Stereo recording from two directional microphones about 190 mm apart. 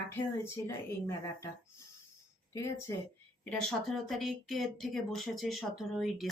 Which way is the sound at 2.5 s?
15° left (ahead or behind).